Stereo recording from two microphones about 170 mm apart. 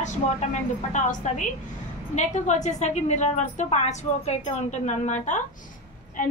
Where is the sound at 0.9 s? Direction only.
45° left (ahead or behind).